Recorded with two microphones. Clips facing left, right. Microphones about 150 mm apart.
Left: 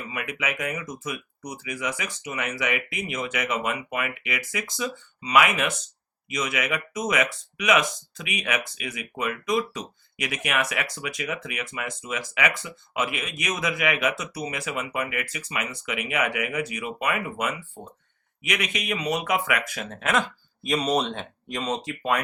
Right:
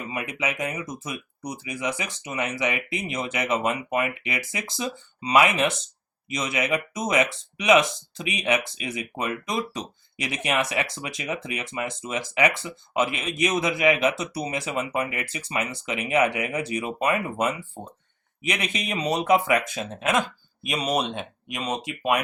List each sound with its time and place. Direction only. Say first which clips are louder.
0.1 s speech: right 1 dB; 30° right (ahead or behind)